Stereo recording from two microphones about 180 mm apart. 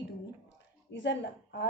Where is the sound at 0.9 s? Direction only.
90° left.